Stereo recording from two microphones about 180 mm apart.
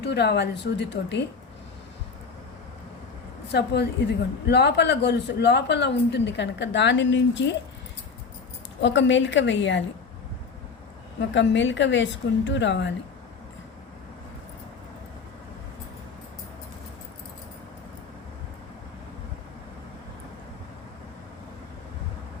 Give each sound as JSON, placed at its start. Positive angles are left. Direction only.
{"t": 0.0, "sound": "a woman's voice", "side_deg": 70}
{"t": 3.5, "sound": "a woman's voice", "side_deg": 70}
{"t": 8.8, "sound": "a woman's voice", "side_deg": 90}
{"t": 11.2, "sound": "a woman's voice", "side_deg": 85}